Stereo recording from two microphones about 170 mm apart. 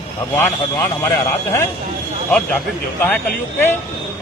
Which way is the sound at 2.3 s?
10° left (ahead or behind).